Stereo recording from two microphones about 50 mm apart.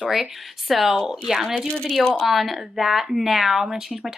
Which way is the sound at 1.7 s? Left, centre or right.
Centre.